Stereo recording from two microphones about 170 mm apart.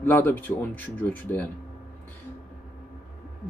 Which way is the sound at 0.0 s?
10° left (ahead or behind).